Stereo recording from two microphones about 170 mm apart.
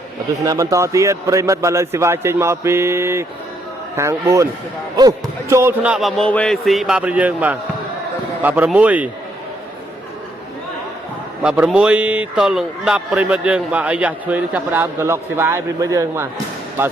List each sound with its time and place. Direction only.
0.4 s a man's voice: 20° right (ahead or behind)
11.4 s a man's voice: 5° right (ahead or behind)